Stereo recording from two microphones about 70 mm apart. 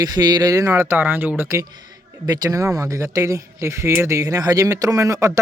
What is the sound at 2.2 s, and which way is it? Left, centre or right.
Speech, right.